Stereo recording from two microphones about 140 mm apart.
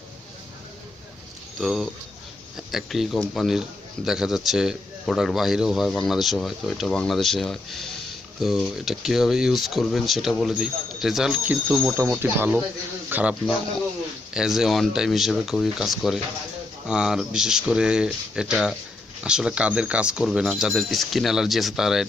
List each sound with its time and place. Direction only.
1.5 s a man's voice: centre (ahead or behind)